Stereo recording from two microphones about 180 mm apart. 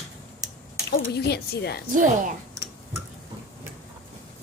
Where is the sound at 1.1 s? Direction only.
65° left (ahead or behind).